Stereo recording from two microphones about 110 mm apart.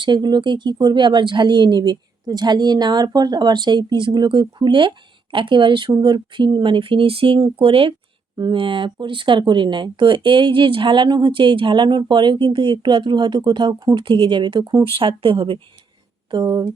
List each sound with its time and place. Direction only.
0.0 s speech: 40° right (ahead or behind)
8.4 s speech: 45° right (ahead or behind)
16.3 s speech: 40° right (ahead or behind)